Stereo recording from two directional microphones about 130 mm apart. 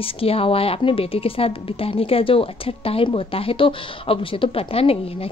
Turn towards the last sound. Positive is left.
turn(degrees=50)  # may be behind; listen again after turning